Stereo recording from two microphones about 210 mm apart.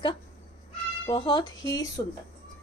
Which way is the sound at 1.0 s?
20° left (ahead or behind).